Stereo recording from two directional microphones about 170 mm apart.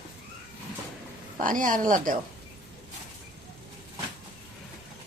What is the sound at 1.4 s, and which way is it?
Speech, 50° right (ahead or behind).